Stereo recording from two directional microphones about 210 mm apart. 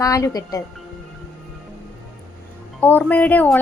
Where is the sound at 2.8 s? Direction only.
10° left (ahead or behind).